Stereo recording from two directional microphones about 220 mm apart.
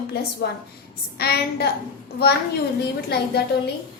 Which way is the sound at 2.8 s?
45° left (ahead or behind).